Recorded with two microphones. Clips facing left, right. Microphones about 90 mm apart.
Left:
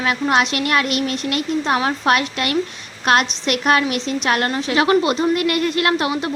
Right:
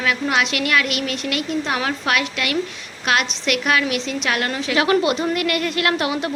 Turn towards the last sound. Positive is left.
turn(degrees=30)  # may be behind; listen again after turning